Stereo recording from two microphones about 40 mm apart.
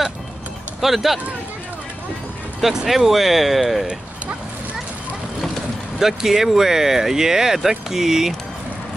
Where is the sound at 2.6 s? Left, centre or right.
Centre.